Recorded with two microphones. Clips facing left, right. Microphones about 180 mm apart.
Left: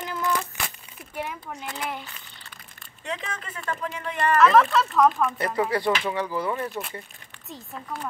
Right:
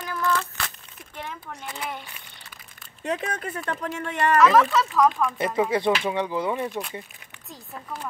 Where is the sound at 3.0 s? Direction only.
45° right (ahead or behind).